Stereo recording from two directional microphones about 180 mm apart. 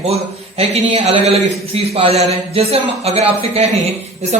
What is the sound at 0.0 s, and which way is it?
Speech, 35° right (ahead or behind).